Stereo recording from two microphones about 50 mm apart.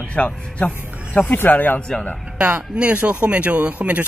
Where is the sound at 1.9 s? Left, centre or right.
Left.